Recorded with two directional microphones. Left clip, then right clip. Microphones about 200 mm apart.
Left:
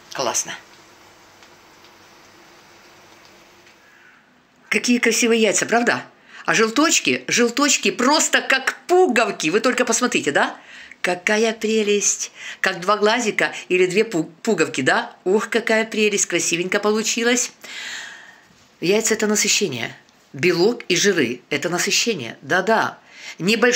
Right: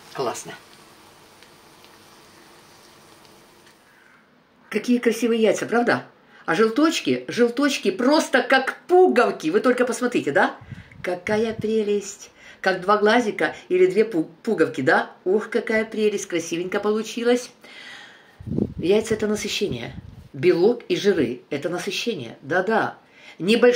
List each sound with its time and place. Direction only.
0.1 s speech: 5° left (ahead or behind)
4.6 s speech: 15° left (ahead or behind)